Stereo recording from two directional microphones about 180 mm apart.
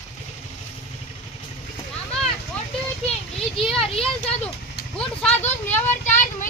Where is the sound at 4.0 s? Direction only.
5° left (ahead or behind).